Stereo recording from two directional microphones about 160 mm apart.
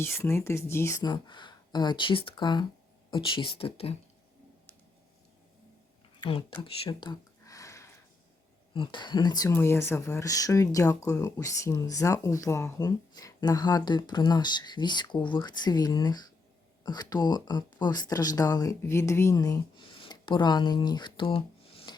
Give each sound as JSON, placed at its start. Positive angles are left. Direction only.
{"t": 0.0, "sound": "speech", "side_deg": 15}
{"t": 6.1, "sound": "speech", "side_deg": 30}
{"t": 6.6, "sound": "a sound", "side_deg": 30}
{"t": 8.7, "sound": "speech", "side_deg": 30}
{"t": 9.5, "sound": "speech", "side_deg": 15}